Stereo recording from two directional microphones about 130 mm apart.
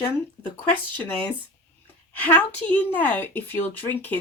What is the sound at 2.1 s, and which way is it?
A woman's voice, 15° left (ahead or behind).